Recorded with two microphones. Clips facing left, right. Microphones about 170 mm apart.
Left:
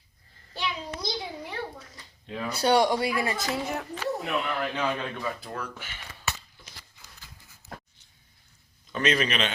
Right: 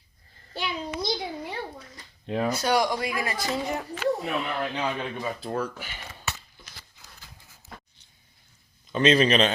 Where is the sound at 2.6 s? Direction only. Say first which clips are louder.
Left 6 dB; 30° left (ahead or behind).